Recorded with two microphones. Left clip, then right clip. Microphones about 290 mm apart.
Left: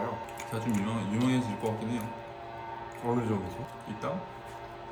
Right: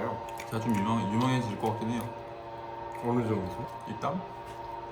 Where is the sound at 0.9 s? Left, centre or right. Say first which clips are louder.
Right 3 dB; centre.